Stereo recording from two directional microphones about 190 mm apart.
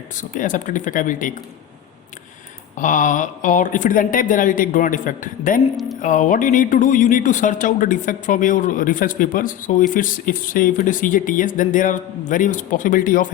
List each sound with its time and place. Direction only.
0.2 s speech: 40° left (ahead or behind)
2.7 s speech: 45° left (ahead or behind)